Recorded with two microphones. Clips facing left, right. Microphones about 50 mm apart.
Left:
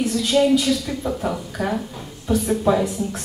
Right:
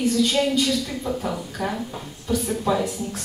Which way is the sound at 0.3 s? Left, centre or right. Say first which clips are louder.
Left 4 dB; left.